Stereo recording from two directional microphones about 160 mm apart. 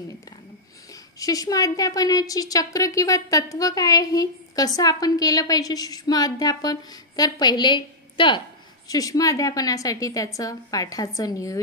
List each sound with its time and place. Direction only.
1.2 s a woman's voice: 20° left (ahead or behind)